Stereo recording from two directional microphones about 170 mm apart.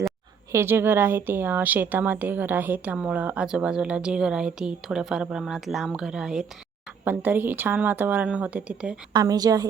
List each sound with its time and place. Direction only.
0.5 s a woman's voice: 15° right (ahead or behind)
9.1 s a woman's voice: 20° right (ahead or behind)